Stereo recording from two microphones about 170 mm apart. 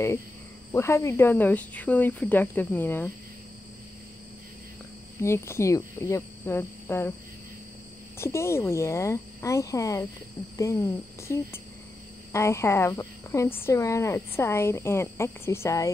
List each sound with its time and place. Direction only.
0.7 s speech: 15° left (ahead or behind)
5.2 s speech: 15° left (ahead or behind)
8.2 s speech: 15° left (ahead or behind)